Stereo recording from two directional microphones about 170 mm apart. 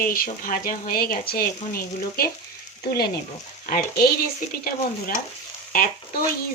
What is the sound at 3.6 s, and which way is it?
Speech, 55° left (ahead or behind).